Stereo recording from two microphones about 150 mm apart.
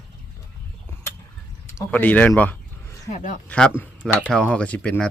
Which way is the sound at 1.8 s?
10° left (ahead or behind).